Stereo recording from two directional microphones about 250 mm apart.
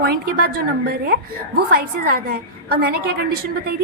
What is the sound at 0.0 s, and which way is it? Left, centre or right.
A woman's voice, right.